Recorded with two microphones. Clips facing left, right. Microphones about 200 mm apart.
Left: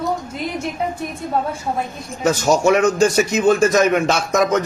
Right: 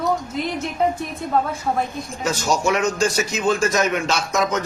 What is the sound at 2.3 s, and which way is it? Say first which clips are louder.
A man's voice: left 6 dB; 55° left (ahead or behind).